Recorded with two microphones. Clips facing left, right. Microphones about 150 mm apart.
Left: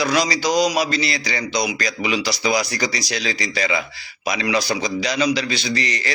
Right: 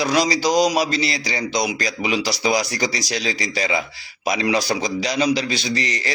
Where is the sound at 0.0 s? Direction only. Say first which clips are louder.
Right 1 dB; 40° right (ahead or behind).